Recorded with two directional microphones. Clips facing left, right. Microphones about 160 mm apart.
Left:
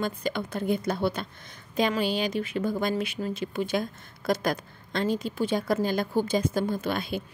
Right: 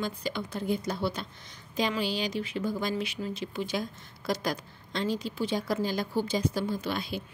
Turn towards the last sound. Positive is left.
turn(degrees=50)  # may be behind; listen again after turning